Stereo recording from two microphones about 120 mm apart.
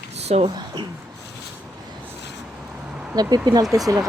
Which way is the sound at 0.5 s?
40° right (ahead or behind).